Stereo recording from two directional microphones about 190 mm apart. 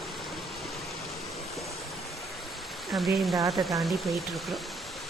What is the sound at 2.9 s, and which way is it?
Speech, centre (ahead or behind).